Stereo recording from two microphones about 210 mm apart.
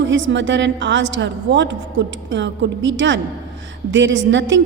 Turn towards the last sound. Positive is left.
turn(degrees=-60)  # may be behind; listen again after turning